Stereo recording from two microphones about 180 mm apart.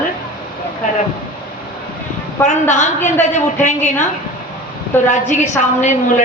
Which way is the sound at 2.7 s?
40° left (ahead or behind).